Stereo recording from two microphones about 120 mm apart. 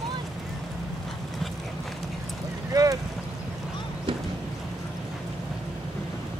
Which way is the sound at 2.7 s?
30° right (ahead or behind).